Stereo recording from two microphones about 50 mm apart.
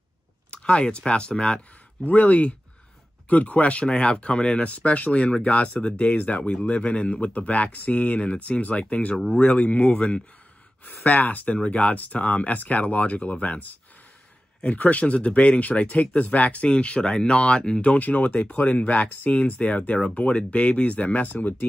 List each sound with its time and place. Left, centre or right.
0.5 s speech: left
2.0 s speech: left
14.8 s speech: left
17.9 s speech: left